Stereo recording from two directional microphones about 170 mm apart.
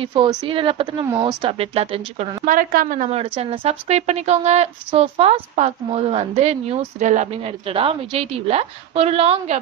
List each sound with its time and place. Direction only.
0.0 s a woman's voice: 25° right (ahead or behind)
2.4 s a woman's voice: 55° right (ahead or behind)
3.1 s a woman's voice: 35° right (ahead or behind)